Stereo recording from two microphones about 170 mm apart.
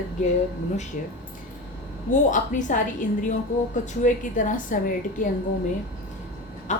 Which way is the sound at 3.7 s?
45° left (ahead or behind).